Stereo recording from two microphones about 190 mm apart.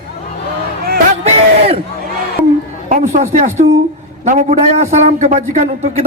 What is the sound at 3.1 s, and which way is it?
A woman's voice, 35° right (ahead or behind).